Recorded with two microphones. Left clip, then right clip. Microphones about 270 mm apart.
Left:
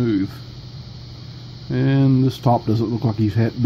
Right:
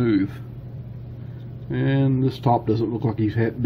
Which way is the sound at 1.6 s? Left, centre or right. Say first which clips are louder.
Left 4 dB; centre.